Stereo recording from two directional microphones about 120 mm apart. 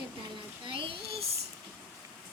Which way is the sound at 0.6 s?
45° right (ahead or behind).